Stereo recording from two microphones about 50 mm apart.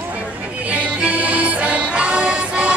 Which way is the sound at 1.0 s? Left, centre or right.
Right.